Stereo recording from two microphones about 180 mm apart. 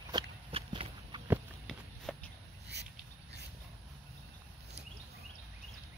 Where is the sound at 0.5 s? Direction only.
30° right (ahead or behind).